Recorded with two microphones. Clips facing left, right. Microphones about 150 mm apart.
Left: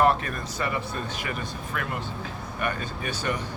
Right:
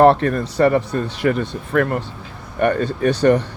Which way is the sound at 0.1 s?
70° right (ahead or behind).